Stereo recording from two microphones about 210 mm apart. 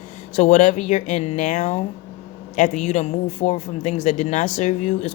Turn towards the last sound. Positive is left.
turn(degrees=35)  # may be behind; listen again after turning